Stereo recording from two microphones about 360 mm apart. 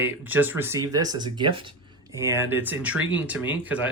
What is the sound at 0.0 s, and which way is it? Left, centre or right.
Speech, centre.